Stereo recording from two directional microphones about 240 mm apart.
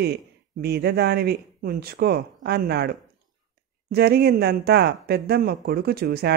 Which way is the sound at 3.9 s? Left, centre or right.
Right.